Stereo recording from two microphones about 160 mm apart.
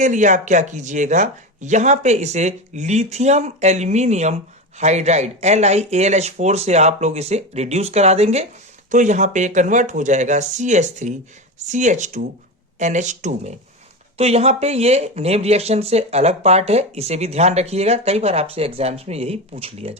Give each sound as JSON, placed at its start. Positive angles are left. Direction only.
{"t": 0.0, "sound": "speech", "side_deg": -50}